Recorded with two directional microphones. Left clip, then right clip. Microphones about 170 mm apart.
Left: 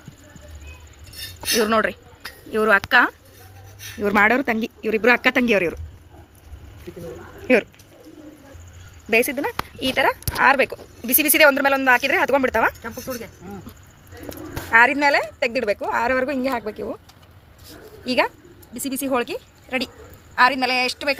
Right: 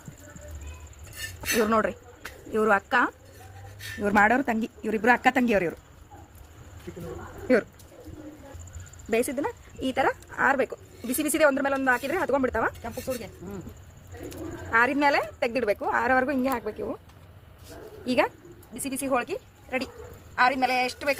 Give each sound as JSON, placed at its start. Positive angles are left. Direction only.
{"t": 1.7, "sound": "a woman's voice", "side_deg": 5}
{"t": 7.4, "sound": "speech", "side_deg": 10}
{"t": 9.0, "sound": "speech", "side_deg": 20}
{"t": 9.8, "sound": "a woman's voice", "side_deg": 10}
{"t": 12.8, "sound": "speech", "side_deg": 5}
{"t": 14.7, "sound": "a woman's voice", "side_deg": 15}
{"t": 18.0, "sound": "speech", "side_deg": 15}
{"t": 18.7, "sound": "a woman's voice", "side_deg": 25}